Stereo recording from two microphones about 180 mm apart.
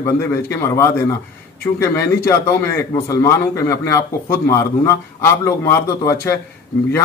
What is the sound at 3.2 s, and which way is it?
A man's voice, 15° left (ahead or behind).